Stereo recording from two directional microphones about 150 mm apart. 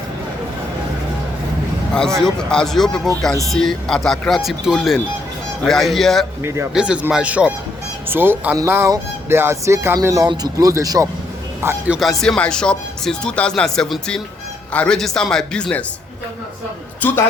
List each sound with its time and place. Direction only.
2.0 s speech: 5° left (ahead or behind)
6.4 s speech: 20° right (ahead or behind)
6.7 s speech: 5° right (ahead or behind)
11.9 s speech: centre (ahead or behind)
17.0 s a man's voice: 10° left (ahead or behind)